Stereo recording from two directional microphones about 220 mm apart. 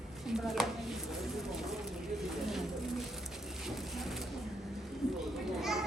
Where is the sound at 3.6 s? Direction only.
Centre (ahead or behind).